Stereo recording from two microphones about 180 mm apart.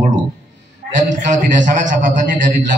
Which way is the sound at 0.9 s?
45° right (ahead or behind).